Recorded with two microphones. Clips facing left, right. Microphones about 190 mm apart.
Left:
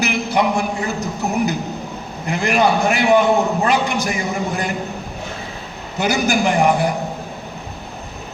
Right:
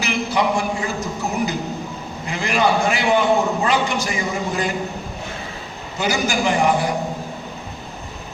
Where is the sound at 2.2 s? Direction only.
60° left (ahead or behind).